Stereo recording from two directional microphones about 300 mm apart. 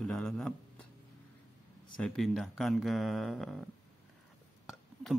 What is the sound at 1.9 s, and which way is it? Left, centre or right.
Speech, centre.